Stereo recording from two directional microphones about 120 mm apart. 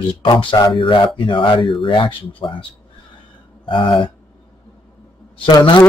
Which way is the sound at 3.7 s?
45° left (ahead or behind).